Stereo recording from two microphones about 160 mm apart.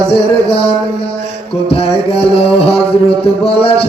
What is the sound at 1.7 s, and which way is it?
Music, 35° left (ahead or behind).